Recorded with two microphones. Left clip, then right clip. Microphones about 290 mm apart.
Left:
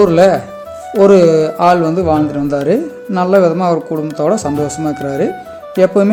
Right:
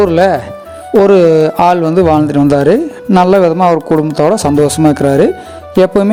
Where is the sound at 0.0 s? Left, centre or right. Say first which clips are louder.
Even; right.